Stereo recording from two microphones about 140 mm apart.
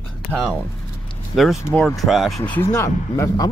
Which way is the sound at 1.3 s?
Centre (ahead or behind).